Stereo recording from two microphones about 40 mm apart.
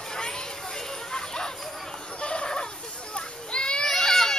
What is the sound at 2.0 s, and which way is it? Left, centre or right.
Children playing, left.